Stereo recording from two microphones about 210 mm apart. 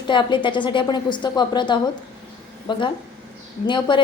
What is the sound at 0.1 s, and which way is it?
A woman's voice, 20° left (ahead or behind).